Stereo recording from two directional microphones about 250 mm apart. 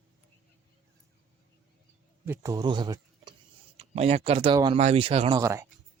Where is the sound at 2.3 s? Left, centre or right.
Centre.